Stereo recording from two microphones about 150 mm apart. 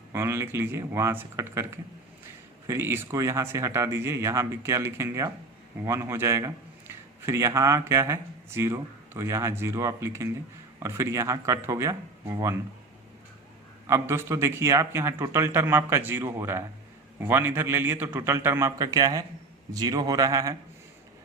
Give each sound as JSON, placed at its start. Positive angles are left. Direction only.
{"t": 0.1, "sound": "a man's voice", "side_deg": -15}
{"t": 13.8, "sound": "a man's voice", "side_deg": -20}